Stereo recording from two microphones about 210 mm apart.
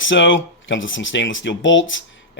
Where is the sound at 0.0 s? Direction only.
65° left (ahead or behind).